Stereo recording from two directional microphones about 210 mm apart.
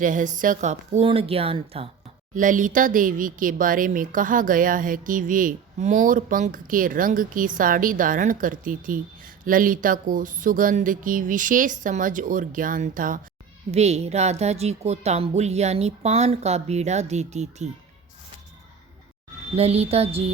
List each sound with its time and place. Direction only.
0.0 s speech: 40° right (ahead or behind)
2.3 s speech: 40° right (ahead or behind)
19.5 s a sound: 30° right (ahead or behind)